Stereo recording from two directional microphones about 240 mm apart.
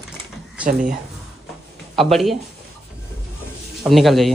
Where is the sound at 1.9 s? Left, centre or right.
Centre.